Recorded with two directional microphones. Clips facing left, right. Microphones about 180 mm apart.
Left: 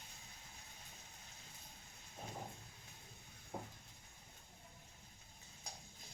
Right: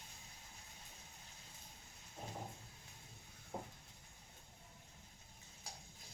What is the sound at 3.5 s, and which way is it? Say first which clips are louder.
Stir: right 1 dB; 5° right (ahead or behind).